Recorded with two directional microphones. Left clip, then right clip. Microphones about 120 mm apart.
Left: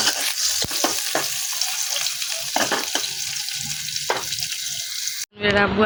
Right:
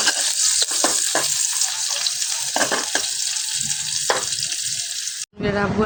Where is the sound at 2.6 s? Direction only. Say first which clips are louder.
Right 1 dB; 15° right (ahead or behind).